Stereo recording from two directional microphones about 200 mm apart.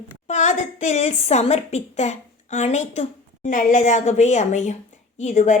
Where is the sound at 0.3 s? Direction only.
35° left (ahead or behind).